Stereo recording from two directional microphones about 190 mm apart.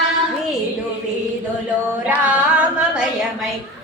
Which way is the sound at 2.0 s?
10° right (ahead or behind).